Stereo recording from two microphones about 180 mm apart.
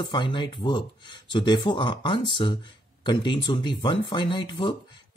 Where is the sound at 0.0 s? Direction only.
25° left (ahead or behind).